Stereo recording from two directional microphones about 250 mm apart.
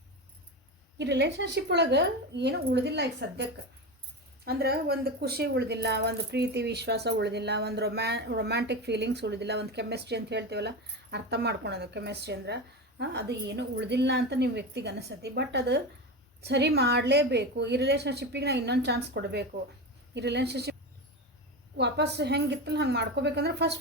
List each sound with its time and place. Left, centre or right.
0.9 s a woman's voice: right
4.4 s a woman's voice: right
21.8 s a woman's voice: right